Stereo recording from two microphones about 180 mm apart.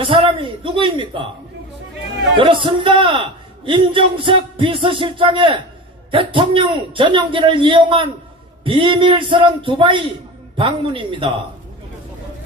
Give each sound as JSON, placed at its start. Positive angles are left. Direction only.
{"t": 0.0, "sound": "a man's voice", "side_deg": -30}
{"t": 2.4, "sound": "a man's voice", "side_deg": -25}